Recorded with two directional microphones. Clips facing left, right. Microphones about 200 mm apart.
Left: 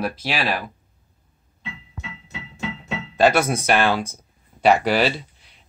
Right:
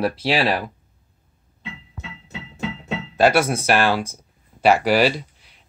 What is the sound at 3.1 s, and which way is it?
Speech, 10° right (ahead or behind).